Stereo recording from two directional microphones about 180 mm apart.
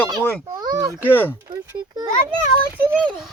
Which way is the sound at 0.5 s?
20° right (ahead or behind).